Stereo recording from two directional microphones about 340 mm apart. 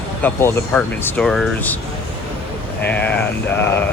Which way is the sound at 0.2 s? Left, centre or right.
Centre.